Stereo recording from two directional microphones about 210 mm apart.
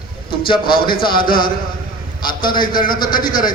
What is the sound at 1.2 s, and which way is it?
A man's voice, 45° left (ahead or behind).